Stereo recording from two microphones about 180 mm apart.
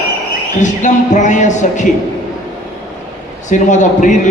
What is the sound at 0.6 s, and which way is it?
A man's voice, 45° left (ahead or behind).